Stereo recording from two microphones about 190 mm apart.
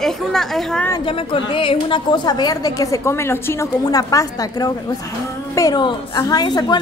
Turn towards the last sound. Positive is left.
turn(degrees=20)  # may be behind; listen again after turning